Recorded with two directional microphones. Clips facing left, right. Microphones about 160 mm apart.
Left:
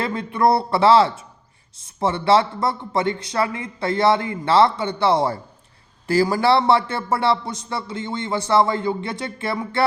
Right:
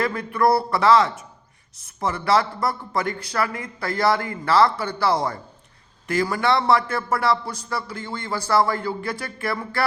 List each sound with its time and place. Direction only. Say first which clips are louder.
0.0 s a man's voice: left 1 dB; 25° left (ahead or behind)